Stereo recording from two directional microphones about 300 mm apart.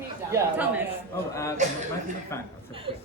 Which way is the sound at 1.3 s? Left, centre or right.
Centre.